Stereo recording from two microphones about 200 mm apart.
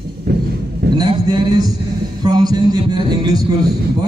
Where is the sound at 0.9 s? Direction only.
20° right (ahead or behind).